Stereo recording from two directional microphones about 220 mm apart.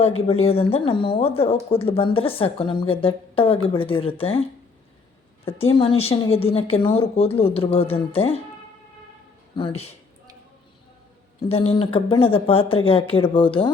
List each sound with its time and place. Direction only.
0.3 s a woman's voice: 25° left (ahead or behind)
5.7 s a woman's voice: 25° left (ahead or behind)
9.6 s a woman's voice: 25° left (ahead or behind)
11.4 s a woman's voice: 25° left (ahead or behind)